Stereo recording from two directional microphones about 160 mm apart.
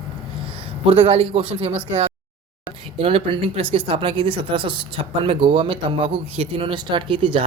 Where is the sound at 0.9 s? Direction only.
40° right (ahead or behind).